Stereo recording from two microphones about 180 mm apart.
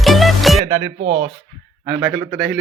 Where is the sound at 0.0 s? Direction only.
Centre (ahead or behind).